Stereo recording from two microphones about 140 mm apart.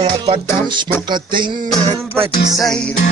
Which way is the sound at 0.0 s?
40° right (ahead or behind).